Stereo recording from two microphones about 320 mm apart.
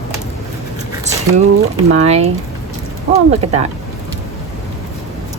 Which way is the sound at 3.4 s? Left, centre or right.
Centre.